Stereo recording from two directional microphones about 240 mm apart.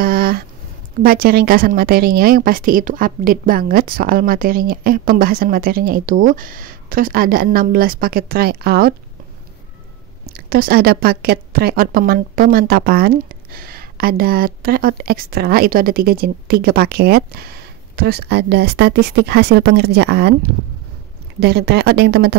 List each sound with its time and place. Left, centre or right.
0.0 s a sound: right
1.0 s a woman's voice: right
10.2 s a woman's voice: right
21.4 s speech: right